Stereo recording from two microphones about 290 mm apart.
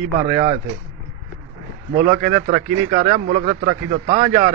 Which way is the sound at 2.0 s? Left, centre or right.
Right.